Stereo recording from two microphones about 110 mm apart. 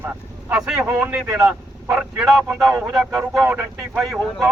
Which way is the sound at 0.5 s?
5° right (ahead or behind).